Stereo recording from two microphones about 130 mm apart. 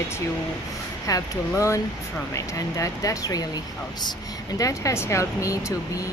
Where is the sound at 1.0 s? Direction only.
25° left (ahead or behind).